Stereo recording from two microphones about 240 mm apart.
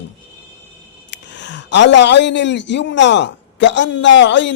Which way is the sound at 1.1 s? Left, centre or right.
Left.